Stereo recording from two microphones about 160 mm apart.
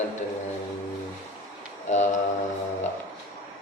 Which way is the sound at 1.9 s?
50° left (ahead or behind).